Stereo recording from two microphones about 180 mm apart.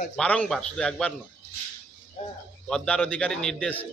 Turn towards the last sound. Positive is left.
turn(degrees=5)  # may be behind; listen again after turning